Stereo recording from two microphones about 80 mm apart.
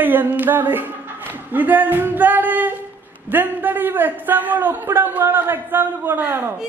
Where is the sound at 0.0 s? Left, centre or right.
Right.